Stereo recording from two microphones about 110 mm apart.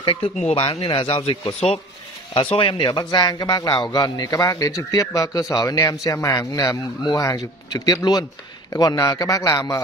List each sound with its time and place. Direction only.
0.0 s speech: 55° left (ahead or behind)
2.5 s a man's voice: 50° left (ahead or behind); by 9.8 s 30° left (ahead or behind)